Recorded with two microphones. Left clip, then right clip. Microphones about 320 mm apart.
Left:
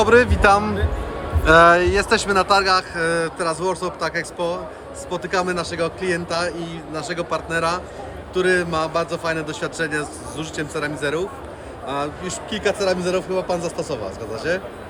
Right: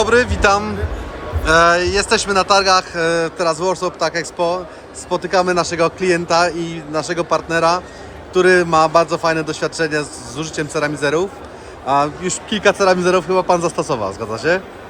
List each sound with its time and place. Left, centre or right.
0.0 s a man's voice: centre; by 14.6 s right